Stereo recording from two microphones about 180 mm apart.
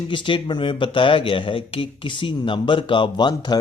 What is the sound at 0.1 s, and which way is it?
Speech, 25° left (ahead or behind).